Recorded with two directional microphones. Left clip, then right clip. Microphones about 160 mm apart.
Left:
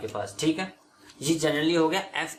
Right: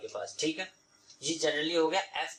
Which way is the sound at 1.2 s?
20° left (ahead or behind).